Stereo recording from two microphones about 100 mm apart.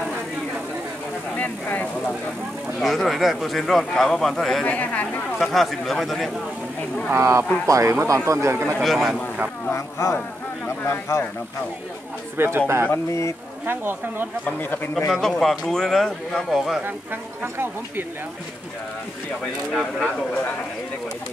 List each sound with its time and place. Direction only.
1.3 s speech: 15° left (ahead or behind)
2.8 s a man's voice: centre (ahead or behind)
4.6 s speech: 15° left (ahead or behind)
5.4 s a man's voice: centre (ahead or behind)
7.1 s speech: 25° right (ahead or behind)
8.7 s a man's voice: centre (ahead or behind)
9.7 s a man's voice: 30° left (ahead or behind)
12.4 s speech: 25° right (ahead or behind)
12.9 s a man's voice: 30° left (ahead or behind)
13.7 s speech: 20° right (ahead or behind)
14.4 s a man's voice: 20° left (ahead or behind)
15.0 s a man's voice: 5° left (ahead or behind)
16.8 s speech: 20° right (ahead or behind)
19.7 s a man's voice: 5° left (ahead or behind)